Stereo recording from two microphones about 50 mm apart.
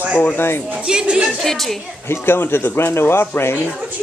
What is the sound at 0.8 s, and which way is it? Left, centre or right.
Speech, centre.